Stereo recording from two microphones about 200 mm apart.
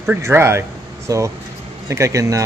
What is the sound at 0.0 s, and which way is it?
A man's voice, 10° right (ahead or behind).